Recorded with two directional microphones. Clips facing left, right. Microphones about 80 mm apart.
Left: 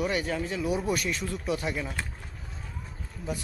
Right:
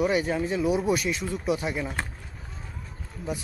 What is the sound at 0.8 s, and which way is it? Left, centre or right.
Speech, centre.